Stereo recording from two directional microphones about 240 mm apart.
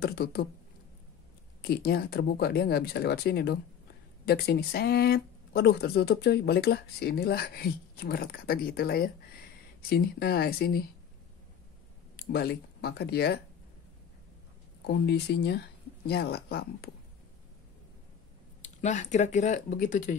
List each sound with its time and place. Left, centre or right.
0.0 s speech: left
1.6 s speech: left
12.2 s speech: left
14.9 s speech: left
18.6 s speech: left